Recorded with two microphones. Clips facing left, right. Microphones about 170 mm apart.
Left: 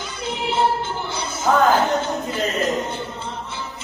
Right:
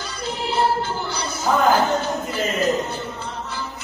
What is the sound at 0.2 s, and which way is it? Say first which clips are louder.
Music: left 1 dB; 20° left (ahead or behind).